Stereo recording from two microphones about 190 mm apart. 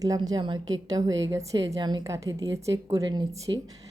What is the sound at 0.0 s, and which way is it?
A woman's voice, 20° right (ahead or behind).